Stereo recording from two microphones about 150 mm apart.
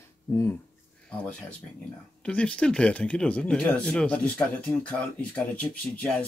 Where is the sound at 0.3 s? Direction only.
15° left (ahead or behind).